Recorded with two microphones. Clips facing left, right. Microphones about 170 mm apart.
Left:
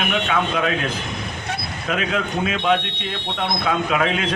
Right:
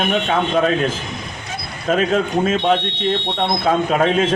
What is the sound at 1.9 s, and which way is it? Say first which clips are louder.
Speech: right 6 dB; 40° right (ahead or behind).